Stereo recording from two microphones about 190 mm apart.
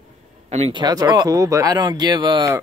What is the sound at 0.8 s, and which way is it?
Speech, 20° right (ahead or behind).